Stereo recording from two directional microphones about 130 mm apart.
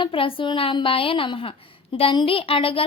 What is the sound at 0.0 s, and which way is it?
Speech, 45° left (ahead or behind).